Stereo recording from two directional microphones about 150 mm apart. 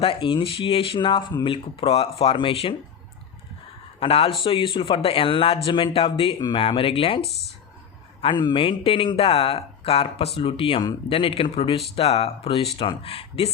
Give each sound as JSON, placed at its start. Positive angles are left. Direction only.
{"t": 0.0, "sound": "speech", "side_deg": 35}
{"t": 4.0, "sound": "speech", "side_deg": 40}
{"t": 8.2, "sound": "speech", "side_deg": 30}